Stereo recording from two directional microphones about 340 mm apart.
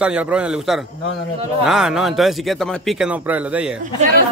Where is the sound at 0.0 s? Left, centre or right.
Centre.